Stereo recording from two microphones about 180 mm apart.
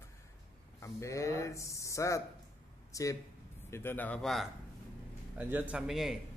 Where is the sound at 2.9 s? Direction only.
20° left (ahead or behind); by 6.2 s centre (ahead or behind).